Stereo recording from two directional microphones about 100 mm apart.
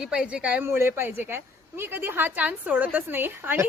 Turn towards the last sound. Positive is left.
turn(degrees=-20)  # may be behind; listen again after turning